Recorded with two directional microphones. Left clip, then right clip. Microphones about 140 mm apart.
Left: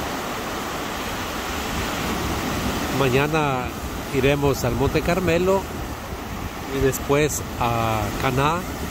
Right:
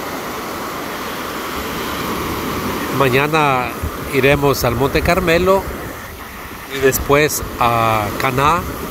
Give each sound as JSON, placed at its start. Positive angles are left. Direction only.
{"t": 3.0, "sound": "speech", "side_deg": 10}
{"t": 7.1, "sound": "speech", "side_deg": 15}